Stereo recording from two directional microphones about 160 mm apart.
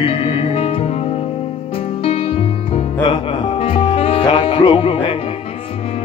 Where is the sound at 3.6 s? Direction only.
35° left (ahead or behind).